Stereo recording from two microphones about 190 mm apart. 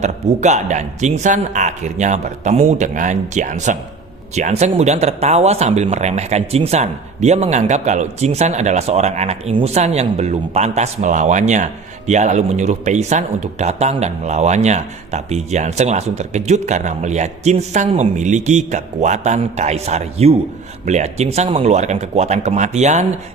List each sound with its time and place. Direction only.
0.0 s speech: 35° right (ahead or behind)